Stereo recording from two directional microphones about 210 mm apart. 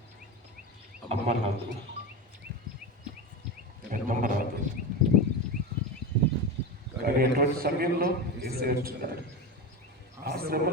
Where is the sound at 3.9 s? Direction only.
40° right (ahead or behind).